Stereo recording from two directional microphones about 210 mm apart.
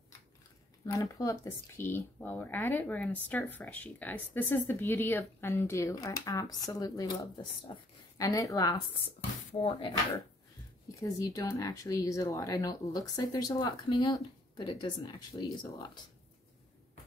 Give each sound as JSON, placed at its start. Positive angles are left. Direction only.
{"t": 0.9, "sound": "speech", "side_deg": 15}
{"t": 9.5, "sound": "speech", "side_deg": 25}